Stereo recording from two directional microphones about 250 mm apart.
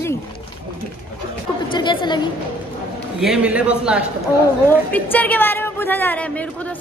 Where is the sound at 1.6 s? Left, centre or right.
Centre.